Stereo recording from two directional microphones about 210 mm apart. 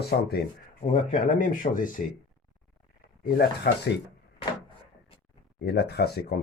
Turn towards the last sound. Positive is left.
turn(degrees=50)  # may be behind; listen again after turning